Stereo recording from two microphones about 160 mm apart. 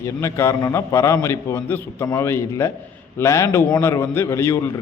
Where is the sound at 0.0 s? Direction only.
15° left (ahead or behind).